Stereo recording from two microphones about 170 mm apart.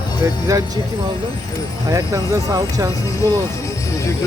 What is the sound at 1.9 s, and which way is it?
Speech, 20° right (ahead or behind).